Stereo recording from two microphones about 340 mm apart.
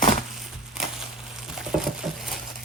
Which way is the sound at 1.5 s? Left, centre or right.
Centre.